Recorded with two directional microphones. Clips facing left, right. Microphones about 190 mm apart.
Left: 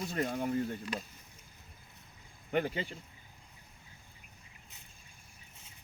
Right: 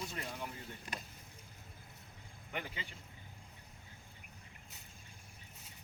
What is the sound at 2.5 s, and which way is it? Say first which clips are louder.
Speech: left 12 dB; 40° left (ahead or behind).